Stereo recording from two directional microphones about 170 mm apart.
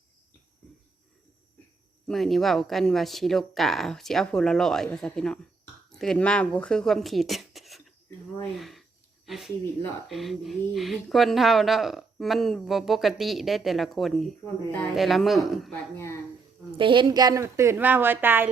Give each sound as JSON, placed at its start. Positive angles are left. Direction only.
{"t": 2.0, "sound": "a woman's voice", "side_deg": 0}
{"t": 16.7, "sound": "speech", "side_deg": -30}